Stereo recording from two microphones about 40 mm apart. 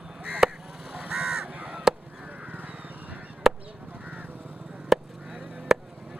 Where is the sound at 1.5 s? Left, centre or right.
Right.